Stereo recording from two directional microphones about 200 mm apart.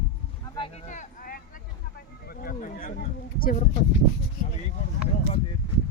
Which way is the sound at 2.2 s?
45° left (ahead or behind).